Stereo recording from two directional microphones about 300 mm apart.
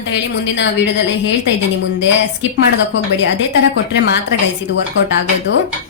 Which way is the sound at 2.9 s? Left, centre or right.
Left.